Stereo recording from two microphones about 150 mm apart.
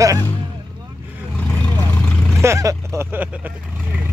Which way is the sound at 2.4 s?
20° right (ahead or behind).